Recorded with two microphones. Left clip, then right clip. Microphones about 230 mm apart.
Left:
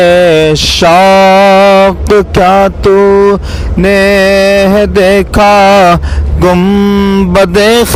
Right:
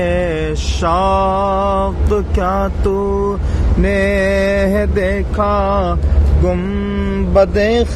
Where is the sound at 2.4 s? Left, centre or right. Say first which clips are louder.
Left 12 dB; left.